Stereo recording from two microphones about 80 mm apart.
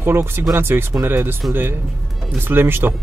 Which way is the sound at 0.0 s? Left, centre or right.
Right.